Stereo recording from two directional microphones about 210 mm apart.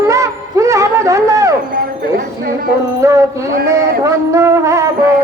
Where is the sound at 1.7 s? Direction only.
45° right (ahead or behind).